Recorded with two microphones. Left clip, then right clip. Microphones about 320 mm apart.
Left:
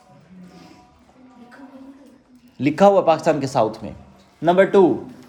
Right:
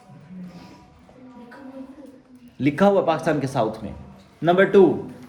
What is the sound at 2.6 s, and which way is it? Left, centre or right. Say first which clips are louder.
Speech: left 4 dB; left.